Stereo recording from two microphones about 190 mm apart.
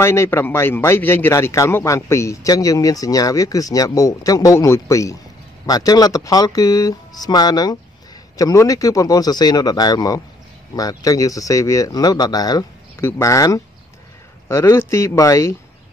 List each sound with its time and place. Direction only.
0.0 s a man's voice: 15° left (ahead or behind)